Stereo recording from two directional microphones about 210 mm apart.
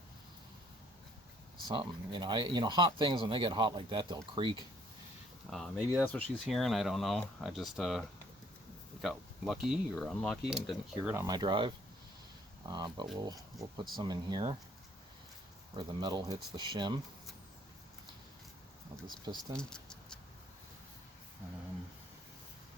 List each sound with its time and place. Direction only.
1.6 s speech: 20° right (ahead or behind)
5.5 s speech: centre (ahead or behind)
11.1 s speech: 15° right (ahead or behind)
15.7 s speech: 20° right (ahead or behind)
19.2 s speech: 20° right (ahead or behind)
19.5 s a sound: 5° left (ahead or behind)